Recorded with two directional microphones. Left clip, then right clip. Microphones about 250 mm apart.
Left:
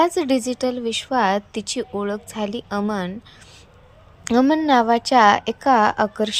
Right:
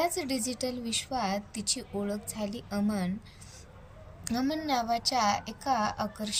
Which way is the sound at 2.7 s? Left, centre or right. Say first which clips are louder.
Left 9 dB; left.